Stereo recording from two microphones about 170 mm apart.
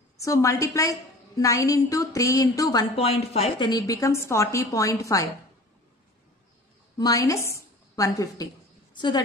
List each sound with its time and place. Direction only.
0.2 s a woman's voice: 15° left (ahead or behind)
3.0 s a woman's voice: 35° left (ahead or behind); by 5.3 s 20° left (ahead or behind)
7.0 s a woman's voice: 20° left (ahead or behind)